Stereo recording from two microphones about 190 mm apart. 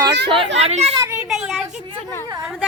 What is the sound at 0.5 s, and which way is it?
Speech, 35° right (ahead or behind).